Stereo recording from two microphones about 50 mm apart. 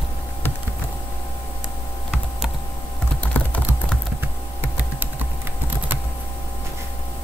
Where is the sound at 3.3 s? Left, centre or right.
Left.